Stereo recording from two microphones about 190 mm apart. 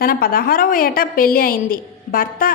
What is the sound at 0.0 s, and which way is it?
A woman's voice, 50° left (ahead or behind).